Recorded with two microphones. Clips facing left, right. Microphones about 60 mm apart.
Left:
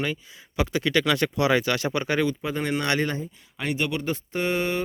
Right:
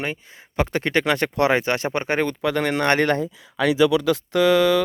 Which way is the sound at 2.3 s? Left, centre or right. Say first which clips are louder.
Right 4 dB; right.